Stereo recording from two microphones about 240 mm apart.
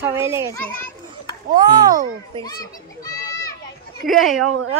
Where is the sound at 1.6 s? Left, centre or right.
Centre.